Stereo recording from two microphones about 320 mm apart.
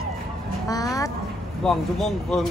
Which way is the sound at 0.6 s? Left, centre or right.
Centre.